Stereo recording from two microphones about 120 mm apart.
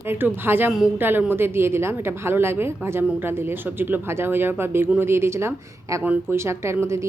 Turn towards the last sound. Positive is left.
turn(degrees=-25)  # may be behind; listen again after turning